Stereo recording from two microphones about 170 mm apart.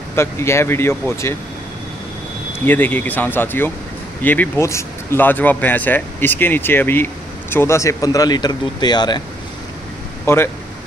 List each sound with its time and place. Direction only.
0.1 s speech: 15° left (ahead or behind)
2.6 s speech: 10° left (ahead or behind)
10.2 s speech: 15° left (ahead or behind)